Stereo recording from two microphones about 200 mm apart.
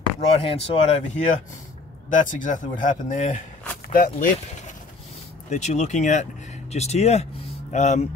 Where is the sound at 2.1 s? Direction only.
40° left (ahead or behind).